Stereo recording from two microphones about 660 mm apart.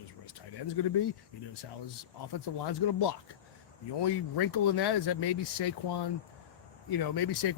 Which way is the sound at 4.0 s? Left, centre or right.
Left.